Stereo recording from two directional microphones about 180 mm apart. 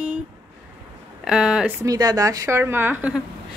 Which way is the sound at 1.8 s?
20° right (ahead or behind).